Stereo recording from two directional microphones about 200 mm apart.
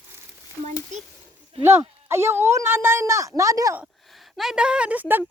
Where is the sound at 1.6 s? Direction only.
10° right (ahead or behind).